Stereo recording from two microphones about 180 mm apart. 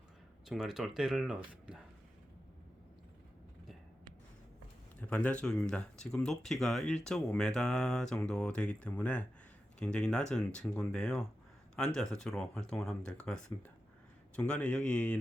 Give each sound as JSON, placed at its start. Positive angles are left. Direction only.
{"t": 0.4, "sound": "speech", "side_deg": 0}
{"t": 4.9, "sound": "speech", "side_deg": 5}